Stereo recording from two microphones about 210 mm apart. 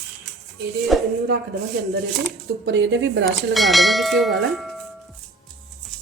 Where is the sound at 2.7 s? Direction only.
55° right (ahead or behind).